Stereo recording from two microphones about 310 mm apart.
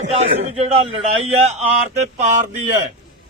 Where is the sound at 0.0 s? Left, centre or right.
Centre.